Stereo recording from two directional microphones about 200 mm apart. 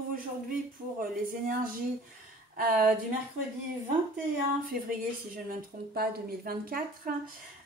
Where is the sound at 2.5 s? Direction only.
45° right (ahead or behind).